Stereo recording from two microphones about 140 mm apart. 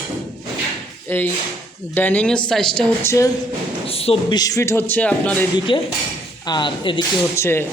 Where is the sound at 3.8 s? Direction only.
45° left (ahead or behind).